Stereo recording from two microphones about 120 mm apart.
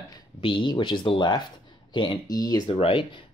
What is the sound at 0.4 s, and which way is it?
Speech, 45° left (ahead or behind).